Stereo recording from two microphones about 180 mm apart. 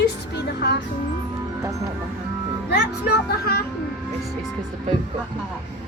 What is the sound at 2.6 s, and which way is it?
Speech, 65° left (ahead or behind).